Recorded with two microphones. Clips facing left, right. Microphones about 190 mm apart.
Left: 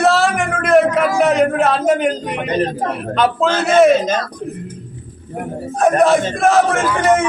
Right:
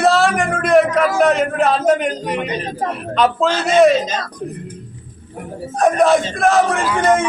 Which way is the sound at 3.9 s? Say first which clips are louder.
Left 2 dB; 50° left (ahead or behind).